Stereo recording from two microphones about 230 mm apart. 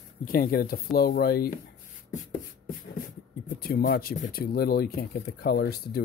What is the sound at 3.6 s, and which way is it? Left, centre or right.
Speech, left.